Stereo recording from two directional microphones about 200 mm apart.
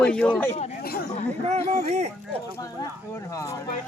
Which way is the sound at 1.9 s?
35° right (ahead or behind).